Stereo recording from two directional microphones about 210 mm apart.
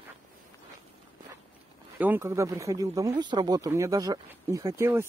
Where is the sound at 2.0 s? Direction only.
10° right (ahead or behind).